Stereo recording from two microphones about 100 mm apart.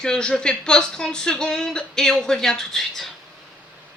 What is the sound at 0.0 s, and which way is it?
A woman's voice, 10° left (ahead or behind).